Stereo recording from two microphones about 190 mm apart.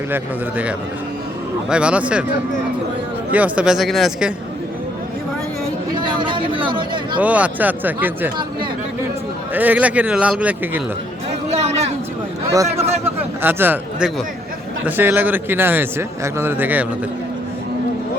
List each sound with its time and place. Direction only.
0.1 s a man's voice: 10° right (ahead or behind)
1.7 s speech: 5° right (ahead or behind)
3.3 s speech: 5° right (ahead or behind)
6.0 s speech: 25° right (ahead or behind)
7.2 s a man's voice: 5° right (ahead or behind)
9.6 s a man's voice: 10° right (ahead or behind)
11.5 s a sound: 35° right (ahead or behind)
12.6 s a man's voice: 35° right (ahead or behind)
13.4 s a man's voice: 10° right (ahead or behind)